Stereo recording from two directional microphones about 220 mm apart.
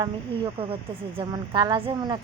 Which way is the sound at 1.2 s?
20° right (ahead or behind).